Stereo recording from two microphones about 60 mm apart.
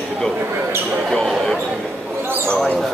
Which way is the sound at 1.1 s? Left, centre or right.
Centre.